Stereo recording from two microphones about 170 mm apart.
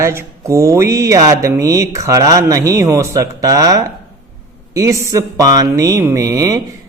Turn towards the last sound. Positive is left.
turn(degrees=-20)  # may be behind; listen again after turning